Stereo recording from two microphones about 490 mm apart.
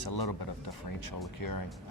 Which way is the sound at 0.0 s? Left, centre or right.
Left.